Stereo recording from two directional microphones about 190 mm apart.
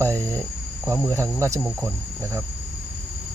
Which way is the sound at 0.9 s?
15° right (ahead or behind).